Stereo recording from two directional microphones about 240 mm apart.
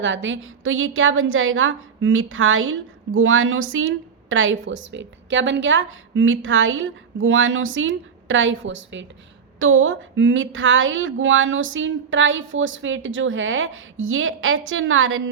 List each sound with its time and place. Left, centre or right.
0.0 s a woman's voice: right